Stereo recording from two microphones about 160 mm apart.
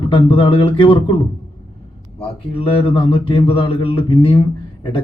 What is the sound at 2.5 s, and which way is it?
Speech, 35° left (ahead or behind).